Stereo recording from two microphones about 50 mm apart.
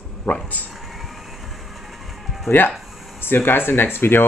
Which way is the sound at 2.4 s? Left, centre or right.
Left.